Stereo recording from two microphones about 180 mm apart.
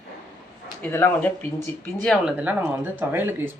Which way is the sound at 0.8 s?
10° left (ahead or behind).